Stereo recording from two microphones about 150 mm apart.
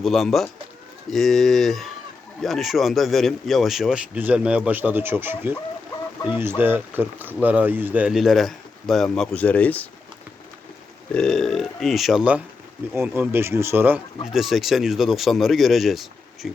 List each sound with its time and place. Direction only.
0.0 s speech: centre (ahead or behind)
11.1 s speech: 5° left (ahead or behind); by 14.0 s 15° right (ahead or behind)
14.3 s speech: centre (ahead or behind)